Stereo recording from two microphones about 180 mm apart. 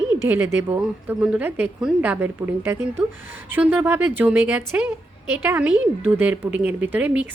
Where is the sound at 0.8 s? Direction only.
5° right (ahead or behind).